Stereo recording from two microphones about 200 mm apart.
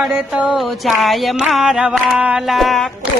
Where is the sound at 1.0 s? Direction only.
Centre (ahead or behind).